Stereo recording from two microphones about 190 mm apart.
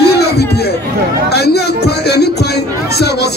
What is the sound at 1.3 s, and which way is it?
Speech, 60° left (ahead or behind).